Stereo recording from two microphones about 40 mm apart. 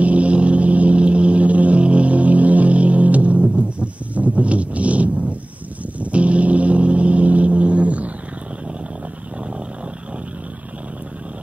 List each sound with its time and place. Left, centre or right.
0.0 s vehicle: right